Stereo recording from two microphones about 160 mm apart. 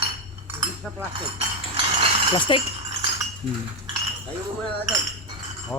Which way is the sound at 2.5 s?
30° left (ahead or behind).